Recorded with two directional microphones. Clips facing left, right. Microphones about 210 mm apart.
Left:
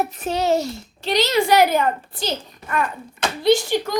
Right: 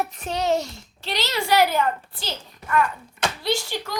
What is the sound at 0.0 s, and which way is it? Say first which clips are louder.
A child's voice: left 4 dB; 5° left (ahead or behind).